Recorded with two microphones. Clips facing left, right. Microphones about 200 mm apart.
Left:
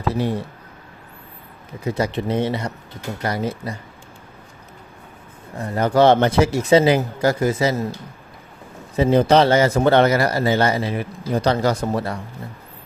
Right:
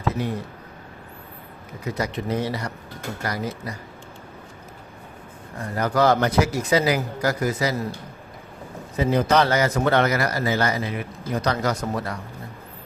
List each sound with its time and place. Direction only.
0.1 s speech: 30° left (ahead or behind)
1.8 s speech: 30° left (ahead or behind)
5.5 s speech: 25° left (ahead or behind)
9.0 s speech: 30° left (ahead or behind)